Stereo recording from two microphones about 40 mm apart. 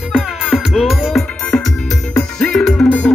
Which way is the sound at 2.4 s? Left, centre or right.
Centre.